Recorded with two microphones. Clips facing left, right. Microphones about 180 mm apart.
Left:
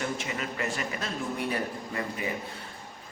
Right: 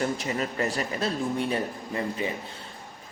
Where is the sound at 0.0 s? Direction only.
40° right (ahead or behind).